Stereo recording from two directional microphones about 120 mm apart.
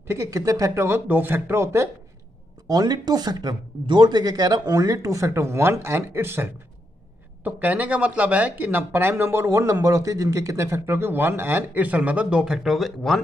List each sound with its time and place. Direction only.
0.1 s speech: 25° right (ahead or behind)
0.8 s speech: 15° right (ahead or behind)
2.7 s speech: 35° right (ahead or behind); by 13.2 s centre (ahead or behind)